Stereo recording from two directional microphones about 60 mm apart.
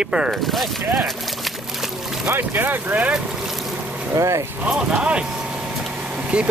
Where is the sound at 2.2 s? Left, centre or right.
Right.